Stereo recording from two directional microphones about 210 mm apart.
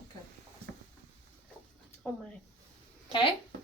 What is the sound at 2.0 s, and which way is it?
Speech, 5° left (ahead or behind).